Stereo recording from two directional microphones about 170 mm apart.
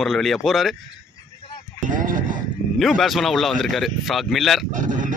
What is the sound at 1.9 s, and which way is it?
Speech, 50° right (ahead or behind).